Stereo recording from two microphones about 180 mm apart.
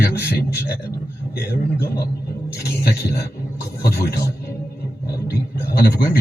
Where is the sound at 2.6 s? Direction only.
60° left (ahead or behind).